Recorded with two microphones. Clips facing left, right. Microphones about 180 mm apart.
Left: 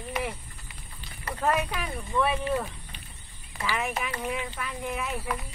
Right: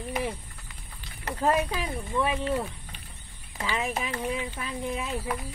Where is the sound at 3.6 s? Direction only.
25° right (ahead or behind).